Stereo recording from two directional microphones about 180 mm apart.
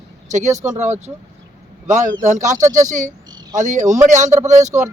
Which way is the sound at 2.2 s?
45° right (ahead or behind).